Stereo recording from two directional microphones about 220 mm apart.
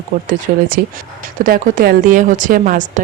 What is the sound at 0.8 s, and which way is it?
Speech, 45° right (ahead or behind).